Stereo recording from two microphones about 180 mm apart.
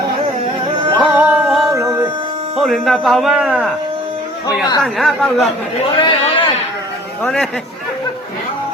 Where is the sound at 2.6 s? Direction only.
Centre (ahead or behind).